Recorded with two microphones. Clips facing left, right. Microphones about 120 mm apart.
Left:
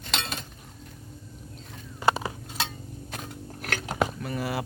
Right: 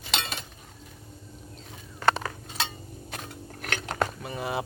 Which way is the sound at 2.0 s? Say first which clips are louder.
Even; 5° left (ahead or behind).